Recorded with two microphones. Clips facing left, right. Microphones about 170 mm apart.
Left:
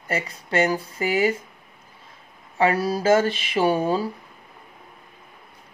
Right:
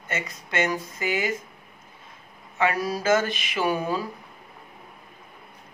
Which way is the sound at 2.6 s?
30° left (ahead or behind).